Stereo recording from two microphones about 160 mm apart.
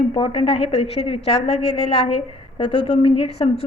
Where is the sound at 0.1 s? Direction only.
30° left (ahead or behind).